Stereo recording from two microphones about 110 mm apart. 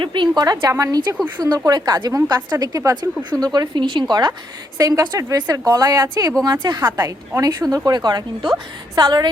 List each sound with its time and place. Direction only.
0.0 s a woman's voice: 45° right (ahead or behind)
0.4 s a woman's voice: 30° right (ahead or behind)